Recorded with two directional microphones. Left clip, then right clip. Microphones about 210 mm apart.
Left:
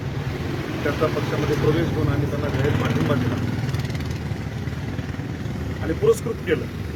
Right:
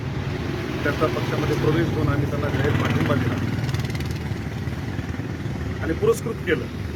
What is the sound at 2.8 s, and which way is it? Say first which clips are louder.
Speech: even; 15° right (ahead or behind).